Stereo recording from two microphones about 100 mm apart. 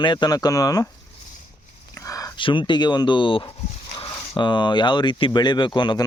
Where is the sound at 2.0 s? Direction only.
35° left (ahead or behind).